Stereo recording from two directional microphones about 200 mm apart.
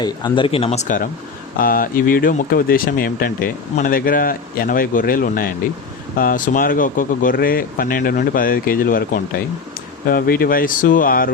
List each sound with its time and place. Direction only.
0.0 s speech: 20° left (ahead or behind); by 11.3 s 45° left (ahead or behind)